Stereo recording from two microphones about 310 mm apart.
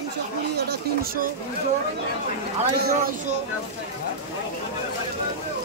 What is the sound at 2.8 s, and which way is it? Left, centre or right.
Speech, right.